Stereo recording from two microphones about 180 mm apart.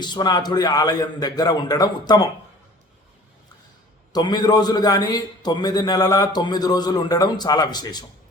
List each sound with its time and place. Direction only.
0.0 s a man's voice: 25° left (ahead or behind)
4.1 s a man's voice: 25° left (ahead or behind)